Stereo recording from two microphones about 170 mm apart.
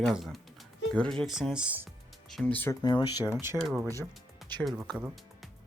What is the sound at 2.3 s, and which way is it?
Speech, 5° left (ahead or behind).